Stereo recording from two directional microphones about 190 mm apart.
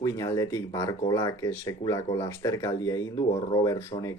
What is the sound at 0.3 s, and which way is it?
Speech, 15° left (ahead or behind).